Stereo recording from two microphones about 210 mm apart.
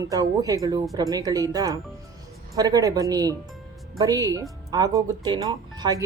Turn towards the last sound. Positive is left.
turn(degrees=-15)  # may be behind; listen again after turning